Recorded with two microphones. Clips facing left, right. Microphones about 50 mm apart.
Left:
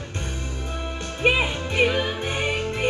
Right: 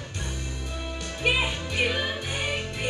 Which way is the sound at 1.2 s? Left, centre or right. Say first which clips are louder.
Left 4 dB; left.